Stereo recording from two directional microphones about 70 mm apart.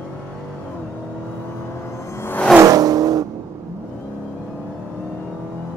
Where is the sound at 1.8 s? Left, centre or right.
Left.